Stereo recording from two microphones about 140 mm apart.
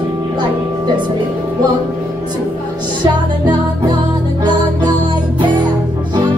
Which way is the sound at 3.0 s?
30° right (ahead or behind).